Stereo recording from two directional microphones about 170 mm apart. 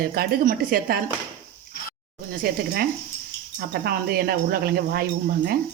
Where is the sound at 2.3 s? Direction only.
60° right (ahead or behind).